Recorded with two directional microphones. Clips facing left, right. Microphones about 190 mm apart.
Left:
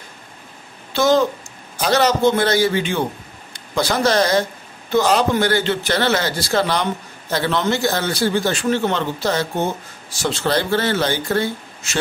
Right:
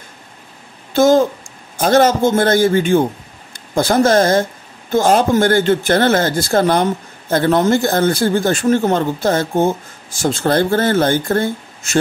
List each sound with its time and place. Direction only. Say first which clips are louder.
0.9 s speech: right 4 dB; 45° right (ahead or behind)